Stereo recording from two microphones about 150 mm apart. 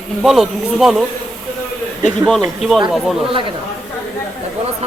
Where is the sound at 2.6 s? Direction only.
Centre (ahead or behind).